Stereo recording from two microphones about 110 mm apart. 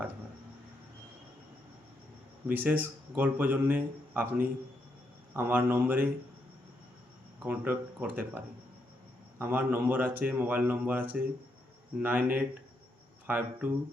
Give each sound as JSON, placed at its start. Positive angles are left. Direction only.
{"t": 2.5, "sound": "a man's voice", "side_deg": -15}
{"t": 7.4, "sound": "a man's voice", "side_deg": -15}
{"t": 9.4, "sound": "a man's voice", "side_deg": -15}